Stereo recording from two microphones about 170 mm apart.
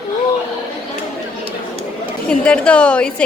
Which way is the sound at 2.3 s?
5° left (ahead or behind).